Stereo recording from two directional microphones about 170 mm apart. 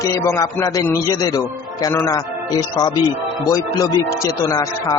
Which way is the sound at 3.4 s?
20° left (ahead or behind).